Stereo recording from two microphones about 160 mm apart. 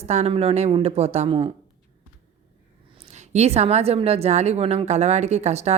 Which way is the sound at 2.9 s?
45° right (ahead or behind).